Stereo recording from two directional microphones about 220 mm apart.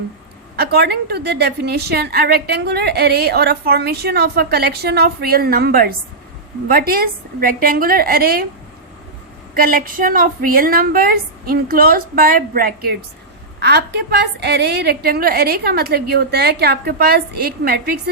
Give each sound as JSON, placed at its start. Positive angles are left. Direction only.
{"t": 0.5, "sound": "a woman's voice", "side_deg": -45}
{"t": 9.6, "sound": "a woman's voice", "side_deg": -40}